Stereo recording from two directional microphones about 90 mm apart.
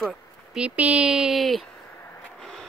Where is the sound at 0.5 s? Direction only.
15° right (ahead or behind); by 1.6 s centre (ahead or behind).